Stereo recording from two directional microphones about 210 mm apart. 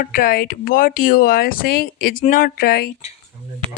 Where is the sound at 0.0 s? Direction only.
40° left (ahead or behind).